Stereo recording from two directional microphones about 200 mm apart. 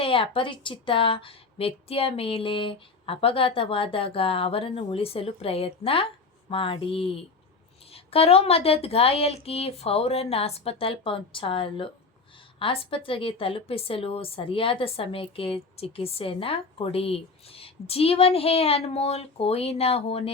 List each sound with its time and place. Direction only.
0.0 s a woman's voice: 25° left (ahead or behind)